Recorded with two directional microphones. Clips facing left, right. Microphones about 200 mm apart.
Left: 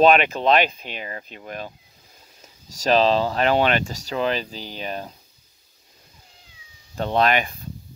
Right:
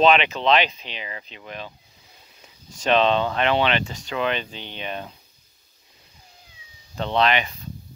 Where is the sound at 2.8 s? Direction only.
35° left (ahead or behind).